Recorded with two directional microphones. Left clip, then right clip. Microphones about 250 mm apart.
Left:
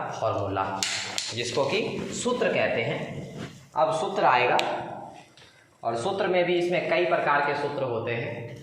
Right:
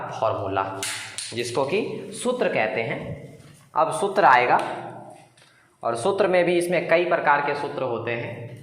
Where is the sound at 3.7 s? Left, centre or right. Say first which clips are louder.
Right 3 dB; right.